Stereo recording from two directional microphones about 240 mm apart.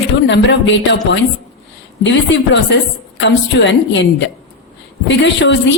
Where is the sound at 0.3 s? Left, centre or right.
Left.